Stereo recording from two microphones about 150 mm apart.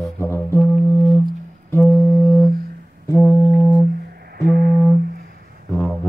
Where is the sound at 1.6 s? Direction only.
15° left (ahead or behind).